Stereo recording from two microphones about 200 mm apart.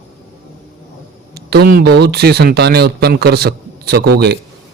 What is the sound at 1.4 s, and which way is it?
Speech, 55° right (ahead or behind).